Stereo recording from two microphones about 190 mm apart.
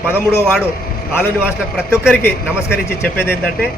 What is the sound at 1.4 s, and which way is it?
Speech, 5° right (ahead or behind).